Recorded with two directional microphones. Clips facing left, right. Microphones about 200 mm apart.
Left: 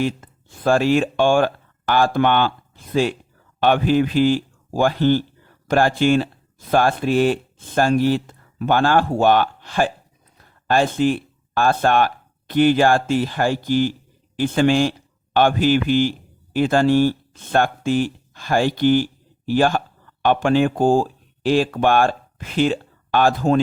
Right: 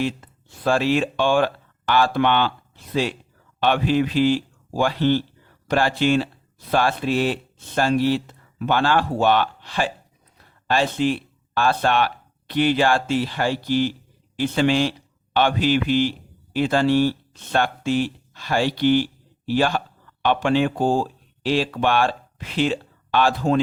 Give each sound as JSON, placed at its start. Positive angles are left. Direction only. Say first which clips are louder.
{"t": 0.0, "sound": "speech", "louder": "left 2 dB", "side_deg": 50}